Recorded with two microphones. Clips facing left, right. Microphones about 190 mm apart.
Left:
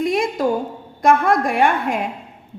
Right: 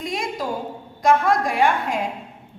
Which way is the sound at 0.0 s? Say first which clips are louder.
Left 8 dB; 55° left (ahead or behind).